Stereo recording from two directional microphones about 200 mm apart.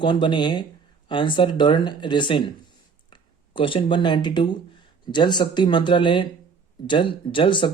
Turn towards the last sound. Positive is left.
turn(degrees=25)  # may be behind; listen again after turning